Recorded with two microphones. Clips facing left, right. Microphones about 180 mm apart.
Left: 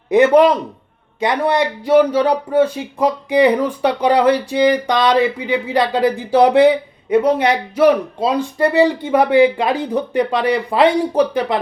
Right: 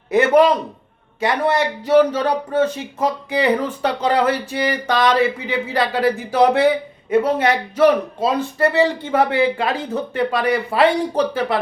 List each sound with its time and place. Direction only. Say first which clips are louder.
0.1 s a man's voice: left 3 dB; 15° left (ahead or behind)